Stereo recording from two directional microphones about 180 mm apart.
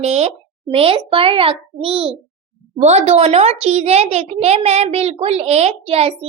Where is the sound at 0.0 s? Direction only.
35° right (ahead or behind).